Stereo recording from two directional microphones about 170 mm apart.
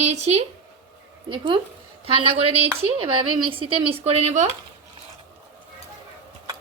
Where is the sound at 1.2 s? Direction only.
30° right (ahead or behind).